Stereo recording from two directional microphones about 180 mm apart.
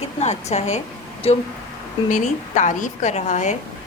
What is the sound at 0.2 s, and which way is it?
A woman's voice, 40° left (ahead or behind).